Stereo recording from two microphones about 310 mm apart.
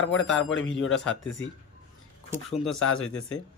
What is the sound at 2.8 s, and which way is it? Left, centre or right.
Speech, left.